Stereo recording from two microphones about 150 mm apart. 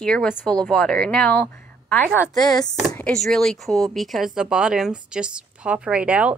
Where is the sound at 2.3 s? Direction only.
25° left (ahead or behind).